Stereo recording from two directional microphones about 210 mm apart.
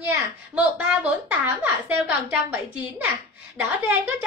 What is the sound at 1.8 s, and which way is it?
A woman's voice, 10° right (ahead or behind).